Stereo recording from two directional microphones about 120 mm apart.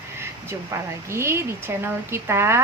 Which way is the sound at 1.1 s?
20° right (ahead or behind).